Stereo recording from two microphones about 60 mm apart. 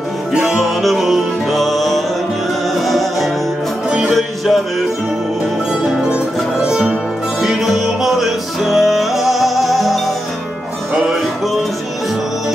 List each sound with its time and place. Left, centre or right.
0.3 s music: centre
5.9 s music: centre
7.4 s music: centre